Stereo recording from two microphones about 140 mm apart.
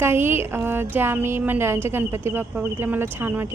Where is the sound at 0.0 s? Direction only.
15° right (ahead or behind).